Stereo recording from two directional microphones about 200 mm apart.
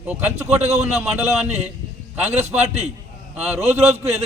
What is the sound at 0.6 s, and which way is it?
Speech, 35° right (ahead or behind).